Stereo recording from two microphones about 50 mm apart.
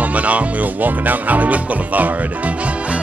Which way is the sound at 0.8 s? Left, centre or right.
Right.